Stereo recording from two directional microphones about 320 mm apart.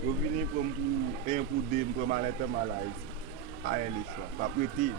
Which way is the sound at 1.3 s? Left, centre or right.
Right.